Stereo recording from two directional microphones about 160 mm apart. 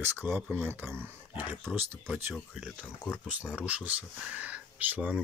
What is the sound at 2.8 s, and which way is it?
Speech, 10° left (ahead or behind).